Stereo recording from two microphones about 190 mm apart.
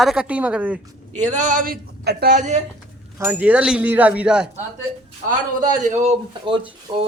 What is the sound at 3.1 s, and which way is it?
Speech, 10° right (ahead or behind).